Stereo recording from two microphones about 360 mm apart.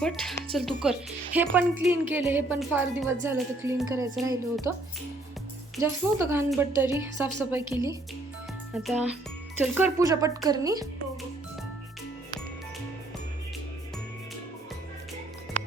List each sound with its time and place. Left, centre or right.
0.0 s a woman's voice: centre
5.7 s a woman's voice: centre
9.7 s a woman's voice: centre